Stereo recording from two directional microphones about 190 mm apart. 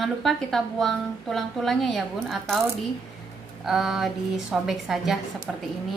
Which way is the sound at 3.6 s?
Centre (ahead or behind).